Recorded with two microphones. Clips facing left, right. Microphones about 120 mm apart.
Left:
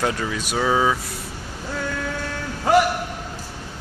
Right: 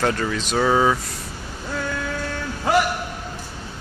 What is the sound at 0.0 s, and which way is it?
Speech, 10° left (ahead or behind).